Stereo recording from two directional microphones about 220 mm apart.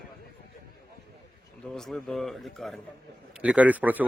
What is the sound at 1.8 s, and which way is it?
A man's voice, centre (ahead or behind).